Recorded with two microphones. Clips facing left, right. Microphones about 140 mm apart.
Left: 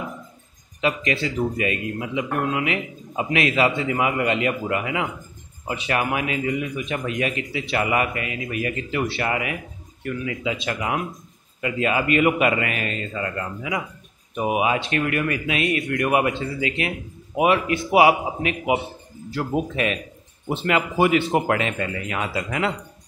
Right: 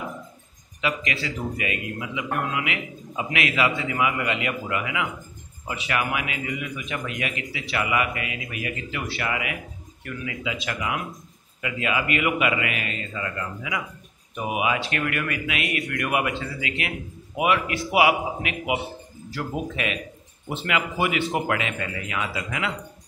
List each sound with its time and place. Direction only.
0.7 s a man's voice: 35° left (ahead or behind)